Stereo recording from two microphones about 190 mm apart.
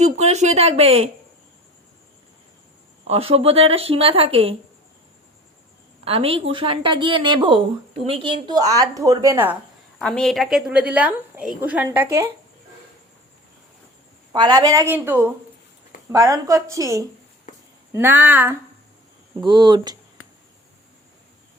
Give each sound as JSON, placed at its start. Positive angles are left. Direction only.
{"t": 0.0, "sound": "speech", "side_deg": -35}
{"t": 3.1, "sound": "speech", "side_deg": -30}
{"t": 6.1, "sound": "a woman's voice", "side_deg": -30}
{"t": 10.0, "sound": "a woman's voice", "side_deg": 5}
{"t": 14.3, "sound": "a woman's voice", "side_deg": -20}
{"t": 19.5, "sound": "a woman's voice", "side_deg": -25}